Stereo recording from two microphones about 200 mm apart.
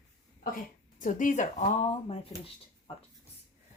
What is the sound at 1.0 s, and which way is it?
Speech, 40° left (ahead or behind).